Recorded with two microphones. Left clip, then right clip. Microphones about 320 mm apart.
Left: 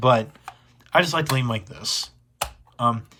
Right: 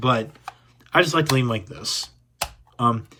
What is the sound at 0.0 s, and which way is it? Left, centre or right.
Speech, centre.